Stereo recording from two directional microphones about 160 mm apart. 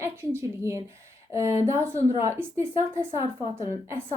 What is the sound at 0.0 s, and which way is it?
A woman's voice, 15° right (ahead or behind).